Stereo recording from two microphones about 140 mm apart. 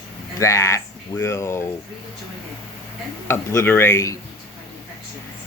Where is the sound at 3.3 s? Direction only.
15° left (ahead or behind).